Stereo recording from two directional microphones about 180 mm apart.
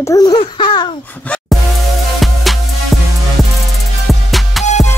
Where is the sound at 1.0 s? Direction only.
10° left (ahead or behind).